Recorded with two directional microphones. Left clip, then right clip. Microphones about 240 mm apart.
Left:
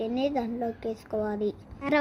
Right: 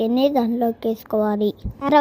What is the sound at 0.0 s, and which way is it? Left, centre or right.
A woman's voice, right.